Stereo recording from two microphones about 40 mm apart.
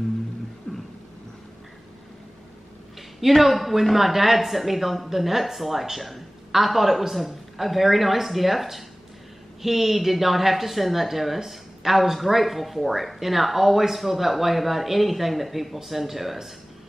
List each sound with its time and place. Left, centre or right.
0.7 s beatboxing: left
3.2 s a woman's voice: centre